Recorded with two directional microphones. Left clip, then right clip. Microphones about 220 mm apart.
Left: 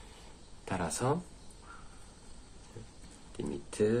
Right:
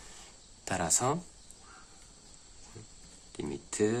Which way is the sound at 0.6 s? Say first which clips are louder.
Right 3 dB; 40° right (ahead or behind).